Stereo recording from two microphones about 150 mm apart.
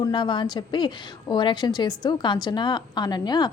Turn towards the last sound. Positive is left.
turn(degrees=30)  # may be behind; listen again after turning